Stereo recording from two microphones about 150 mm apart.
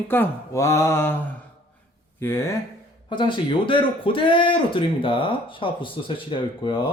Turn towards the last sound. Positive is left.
turn(degrees=35)  # may be behind; listen again after turning